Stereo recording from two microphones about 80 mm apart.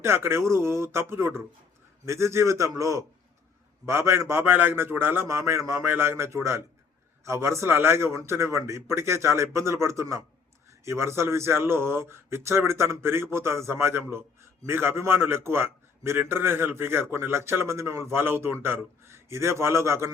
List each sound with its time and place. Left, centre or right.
0.0 s speech: right